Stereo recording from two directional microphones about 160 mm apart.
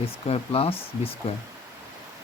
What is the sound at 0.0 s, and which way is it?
Speech, 35° left (ahead or behind).